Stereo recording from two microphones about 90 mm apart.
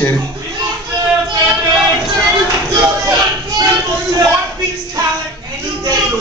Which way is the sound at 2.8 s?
35° right (ahead or behind).